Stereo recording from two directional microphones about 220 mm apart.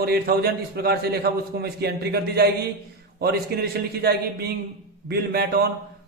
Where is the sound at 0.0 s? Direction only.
45° right (ahead or behind).